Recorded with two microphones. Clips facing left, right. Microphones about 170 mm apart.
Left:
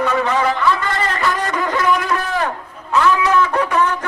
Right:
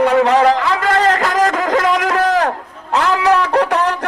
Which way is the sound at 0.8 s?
90° right.